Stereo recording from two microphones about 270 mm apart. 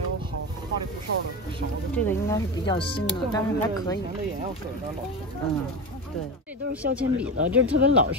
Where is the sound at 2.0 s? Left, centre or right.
Centre.